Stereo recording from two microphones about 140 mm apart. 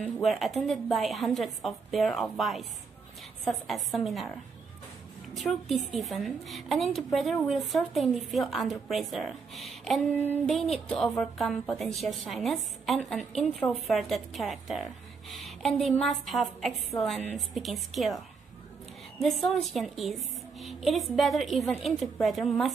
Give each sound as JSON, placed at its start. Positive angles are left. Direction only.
{"t": 0.2, "sound": "a woman's voice", "side_deg": 0}
{"t": 5.3, "sound": "a woman's voice", "side_deg": 0}
{"t": 10.1, "sound": "child singing", "side_deg": 10}
{"t": 10.5, "sound": "a woman's voice", "side_deg": 0}